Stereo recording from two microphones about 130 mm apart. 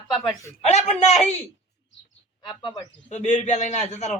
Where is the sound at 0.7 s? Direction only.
60° left (ahead or behind).